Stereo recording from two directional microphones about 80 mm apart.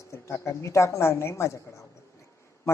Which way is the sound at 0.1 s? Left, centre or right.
Left.